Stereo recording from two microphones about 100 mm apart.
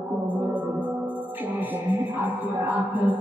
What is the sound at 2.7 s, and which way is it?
Music, 15° right (ahead or behind).